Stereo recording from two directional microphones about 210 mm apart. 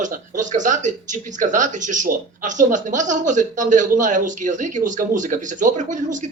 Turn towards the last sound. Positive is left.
turn(degrees=-35)  # may be behind; listen again after turning